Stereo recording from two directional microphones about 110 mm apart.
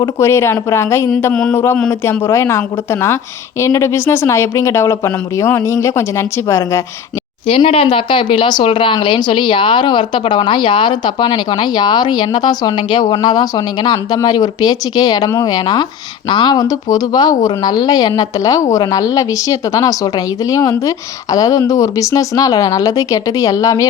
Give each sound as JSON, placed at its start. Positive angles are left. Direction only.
{"t": 0.0, "sound": "speech", "side_deg": 25}
{"t": 1.3, "sound": "a sound", "side_deg": 5}
{"t": 1.5, "sound": "speech", "side_deg": 20}
{"t": 7.4, "sound": "a woman's voice", "side_deg": 60}